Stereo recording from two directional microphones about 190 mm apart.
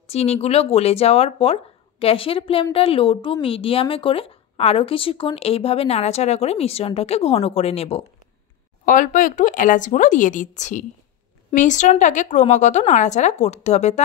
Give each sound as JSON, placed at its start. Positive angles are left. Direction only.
{"t": 0.0, "sound": "speech", "side_deg": 35}
{"t": 8.8, "sound": "speech", "side_deg": 45}